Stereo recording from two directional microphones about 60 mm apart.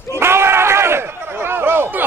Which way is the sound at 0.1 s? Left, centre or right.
Right.